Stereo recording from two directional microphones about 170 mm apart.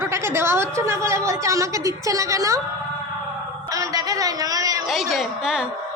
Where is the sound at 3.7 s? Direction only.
20° right (ahead or behind).